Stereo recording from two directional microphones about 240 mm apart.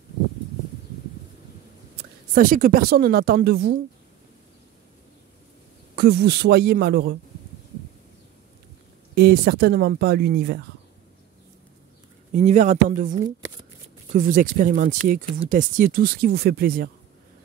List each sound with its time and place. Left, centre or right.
2.3 s speech: right
5.9 s speech: right
9.1 s speech: right
12.3 s speech: right